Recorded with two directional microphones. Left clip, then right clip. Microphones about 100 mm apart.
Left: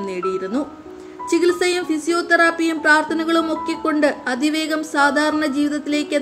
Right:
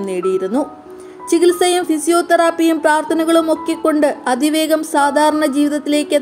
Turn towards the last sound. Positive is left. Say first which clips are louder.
# right 5 dB
turn(degrees=-50)  # may be behind; listen again after turning